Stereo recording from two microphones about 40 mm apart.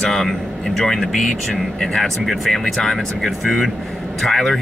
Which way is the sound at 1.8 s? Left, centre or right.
Centre.